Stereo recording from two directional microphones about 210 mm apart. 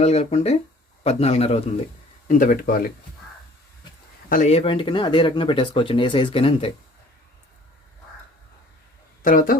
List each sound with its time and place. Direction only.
0.0 s a man's voice: 30° left (ahead or behind)
4.3 s speech: 35° left (ahead or behind)
9.2 s a man's voice: 40° left (ahead or behind)